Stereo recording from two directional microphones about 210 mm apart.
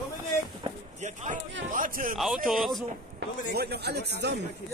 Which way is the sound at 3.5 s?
50° right (ahead or behind).